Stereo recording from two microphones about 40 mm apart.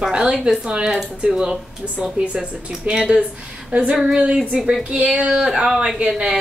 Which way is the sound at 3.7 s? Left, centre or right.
Right.